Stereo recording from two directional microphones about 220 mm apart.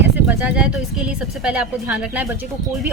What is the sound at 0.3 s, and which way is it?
A woman's voice, 5° right (ahead or behind).